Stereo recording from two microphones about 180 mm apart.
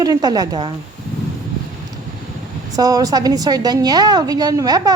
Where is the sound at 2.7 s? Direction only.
20° right (ahead or behind).